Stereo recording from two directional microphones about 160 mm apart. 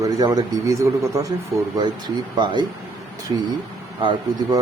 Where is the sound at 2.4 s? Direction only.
30° right (ahead or behind).